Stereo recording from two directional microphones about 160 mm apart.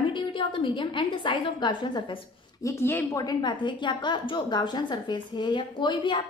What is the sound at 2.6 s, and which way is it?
A woman's voice, 15° left (ahead or behind).